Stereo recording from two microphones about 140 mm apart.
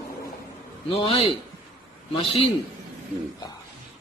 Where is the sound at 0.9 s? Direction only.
40° left (ahead or behind).